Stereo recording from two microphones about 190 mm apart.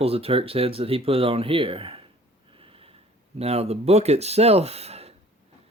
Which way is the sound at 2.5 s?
30° right (ahead or behind).